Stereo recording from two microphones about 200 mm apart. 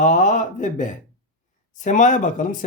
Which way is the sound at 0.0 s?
40° left (ahead or behind).